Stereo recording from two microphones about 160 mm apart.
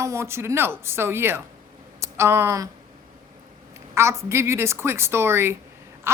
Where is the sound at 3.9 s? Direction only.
15° right (ahead or behind).